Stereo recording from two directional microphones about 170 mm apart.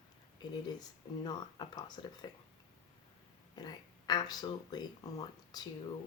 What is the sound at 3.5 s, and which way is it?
Speech, 25° left (ahead or behind).